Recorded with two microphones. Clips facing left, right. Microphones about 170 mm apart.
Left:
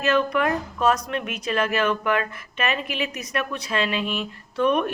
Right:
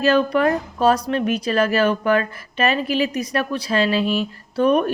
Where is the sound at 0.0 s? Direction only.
35° right (ahead or behind).